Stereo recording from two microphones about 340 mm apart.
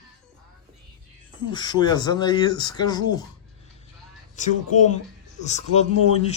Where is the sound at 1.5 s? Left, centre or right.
Centre.